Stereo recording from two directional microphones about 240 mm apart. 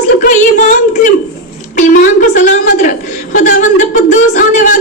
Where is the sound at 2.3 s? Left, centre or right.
Left.